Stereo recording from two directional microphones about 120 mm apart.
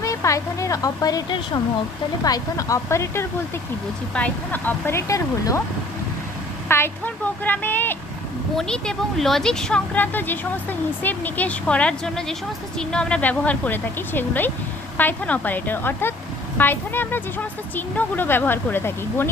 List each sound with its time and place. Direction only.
0.0 s speech: 25° left (ahead or behind)
6.7 s speech: 20° left (ahead or behind)